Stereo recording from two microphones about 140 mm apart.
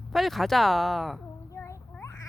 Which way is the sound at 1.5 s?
20° left (ahead or behind).